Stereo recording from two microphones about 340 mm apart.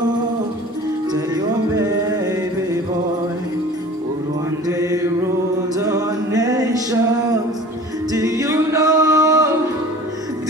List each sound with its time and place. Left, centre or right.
1.1 s music: centre
4.6 s mantra: centre
5.8 s music: centre
8.1 s music: centre